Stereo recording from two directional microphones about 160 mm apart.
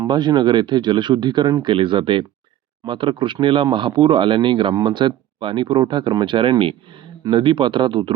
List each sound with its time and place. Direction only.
0.0 s speech: 25° right (ahead or behind)